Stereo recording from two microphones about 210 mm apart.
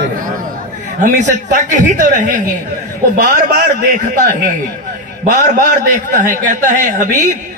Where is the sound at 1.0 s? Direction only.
35° right (ahead or behind).